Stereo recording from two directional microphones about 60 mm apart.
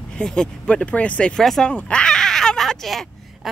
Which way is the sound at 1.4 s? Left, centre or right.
Centre.